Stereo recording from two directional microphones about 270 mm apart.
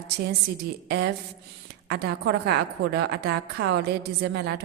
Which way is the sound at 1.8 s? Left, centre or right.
Right.